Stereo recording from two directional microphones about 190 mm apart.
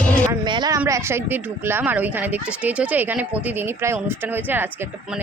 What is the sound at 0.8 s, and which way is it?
Speech, 15° right (ahead or behind).